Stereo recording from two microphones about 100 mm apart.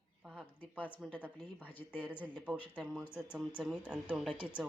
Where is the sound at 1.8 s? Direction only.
20° left (ahead or behind).